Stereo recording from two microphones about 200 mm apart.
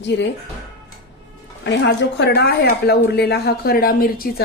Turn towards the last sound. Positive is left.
turn(degrees=45)  # may be behind; listen again after turning